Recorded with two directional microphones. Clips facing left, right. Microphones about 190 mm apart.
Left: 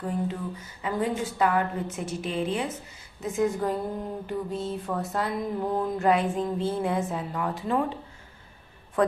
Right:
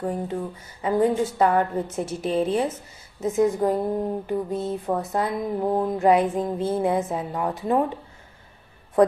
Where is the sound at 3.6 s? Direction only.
25° right (ahead or behind).